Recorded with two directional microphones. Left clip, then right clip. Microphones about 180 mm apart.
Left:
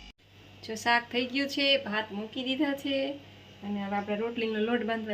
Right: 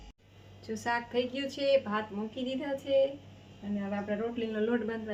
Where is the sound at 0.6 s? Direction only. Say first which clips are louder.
Left 6 dB; 15° left (ahead or behind).